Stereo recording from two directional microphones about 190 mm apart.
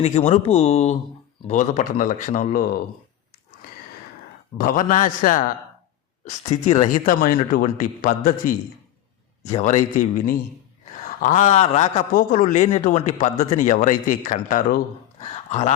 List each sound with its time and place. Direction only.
0.0 s a man's voice: 35° left (ahead or behind)
4.5 s a man's voice: 45° left (ahead or behind)